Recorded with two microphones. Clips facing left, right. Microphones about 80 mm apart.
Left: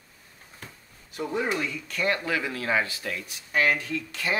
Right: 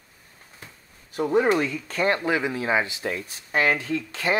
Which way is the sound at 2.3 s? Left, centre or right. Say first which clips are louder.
Right 4 dB; right.